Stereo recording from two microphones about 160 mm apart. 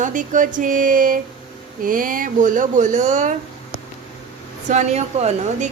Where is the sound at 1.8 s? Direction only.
60° right (ahead or behind).